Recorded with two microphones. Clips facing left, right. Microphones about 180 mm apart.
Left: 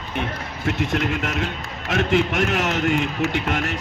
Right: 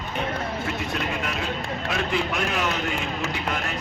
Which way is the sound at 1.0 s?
65° left (ahead or behind).